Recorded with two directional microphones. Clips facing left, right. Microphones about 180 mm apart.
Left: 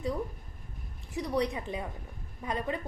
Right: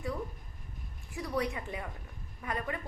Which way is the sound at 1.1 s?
20° left (ahead or behind).